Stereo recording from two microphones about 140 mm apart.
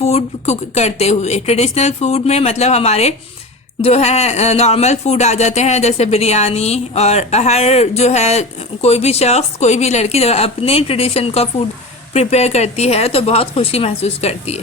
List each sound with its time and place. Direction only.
0.0 s speech: 50° left (ahead or behind)